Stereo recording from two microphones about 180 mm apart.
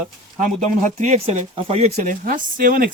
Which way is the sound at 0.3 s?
45° right (ahead or behind).